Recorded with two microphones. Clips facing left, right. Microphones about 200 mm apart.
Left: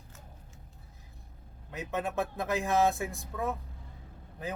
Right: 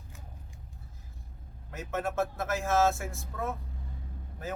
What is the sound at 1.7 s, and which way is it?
Speech, 15° left (ahead or behind).